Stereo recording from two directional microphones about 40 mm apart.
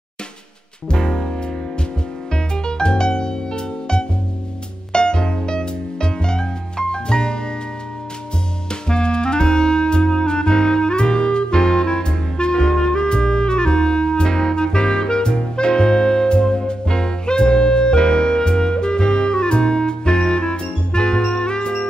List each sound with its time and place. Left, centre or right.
0.8 s music: centre
2.3 s music: left
8.8 s clarinet: left